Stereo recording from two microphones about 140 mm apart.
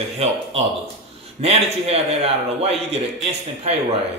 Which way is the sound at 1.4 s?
45° right (ahead or behind).